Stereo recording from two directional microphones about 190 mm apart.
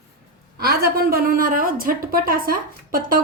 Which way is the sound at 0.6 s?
55° right (ahead or behind).